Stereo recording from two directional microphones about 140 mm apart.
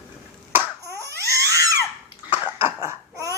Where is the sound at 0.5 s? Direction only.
25° right (ahead or behind).